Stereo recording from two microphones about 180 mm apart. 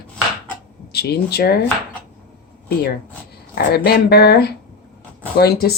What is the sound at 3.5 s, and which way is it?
Speech, 60° left (ahead or behind).